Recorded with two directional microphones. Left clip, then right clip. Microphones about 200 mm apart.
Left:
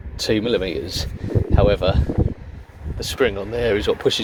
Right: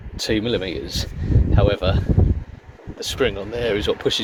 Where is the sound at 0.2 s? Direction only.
15° left (ahead or behind).